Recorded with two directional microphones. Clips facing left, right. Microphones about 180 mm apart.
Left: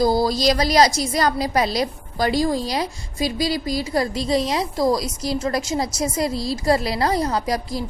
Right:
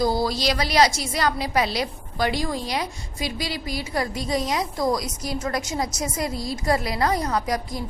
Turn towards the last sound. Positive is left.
turn(degrees=30)  # may be behind; listen again after turning